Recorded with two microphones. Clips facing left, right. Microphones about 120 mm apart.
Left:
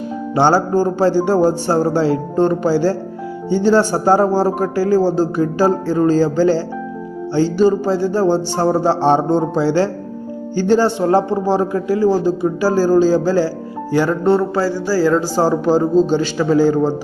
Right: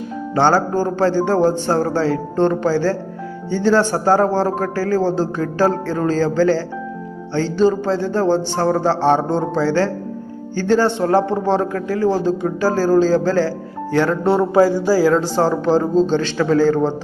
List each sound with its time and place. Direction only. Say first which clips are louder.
0.3 s a man's voice: left 2 dB; 10° left (ahead or behind)
14.3 s speech: right 3 dB; 15° right (ahead or behind)
15.0 s a man's voice: left 1 dB; 5° left (ahead or behind)